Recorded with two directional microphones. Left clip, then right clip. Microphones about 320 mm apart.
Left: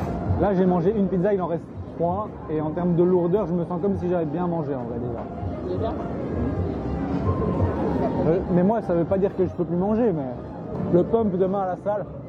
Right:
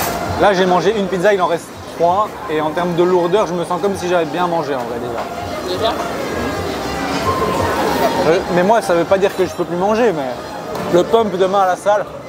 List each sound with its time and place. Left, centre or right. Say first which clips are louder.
0.0 s speech: right 11 dB; centre
5.7 s speech: right 10 dB; centre
7.1 s a sound: right 11 dB; centre
9.9 s speech: right 8 dB; centre